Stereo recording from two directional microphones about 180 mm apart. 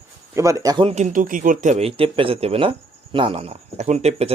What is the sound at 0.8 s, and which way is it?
Speech, 40° right (ahead or behind).